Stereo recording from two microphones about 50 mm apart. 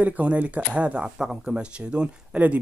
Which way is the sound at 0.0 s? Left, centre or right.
Right.